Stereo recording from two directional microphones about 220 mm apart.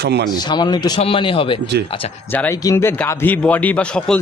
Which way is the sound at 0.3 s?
20° left (ahead or behind).